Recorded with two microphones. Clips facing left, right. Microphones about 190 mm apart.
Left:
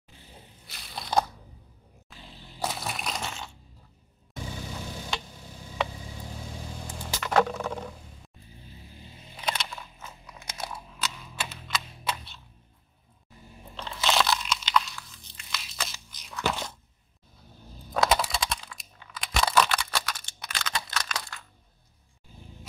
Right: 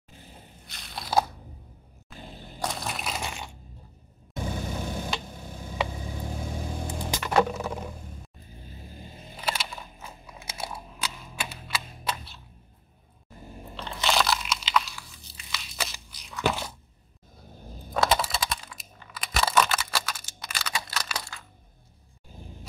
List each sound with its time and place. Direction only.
0.7 s crunch: centre (ahead or behind)
2.1 s a sound: 50° right (ahead or behind)
2.6 s crushing: 5° left (ahead or behind); by 3.5 s 15° right (ahead or behind)
4.4 s vehicle: 50° right (ahead or behind)
5.2 s tick-tock: 50° right (ahead or behind)
5.9 s vehicle: 50° right (ahead or behind)
7.0 s a sound: 10° right (ahead or behind)
8.8 s a sound: 50° right (ahead or behind)
9.4 s crunch: 5° right (ahead or behind)
13.7 s crunch: centre (ahead or behind)
16.4 s a sound: 10° right (ahead or behind)
17.9 s computer keyboard: centre (ahead or behind)